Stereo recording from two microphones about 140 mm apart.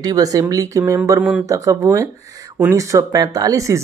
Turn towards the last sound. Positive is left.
turn(degrees=-25)  # may be behind; listen again after turning